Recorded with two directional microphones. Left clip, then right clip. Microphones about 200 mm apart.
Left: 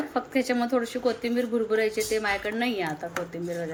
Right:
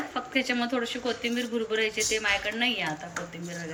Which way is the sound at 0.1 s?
25° left (ahead or behind).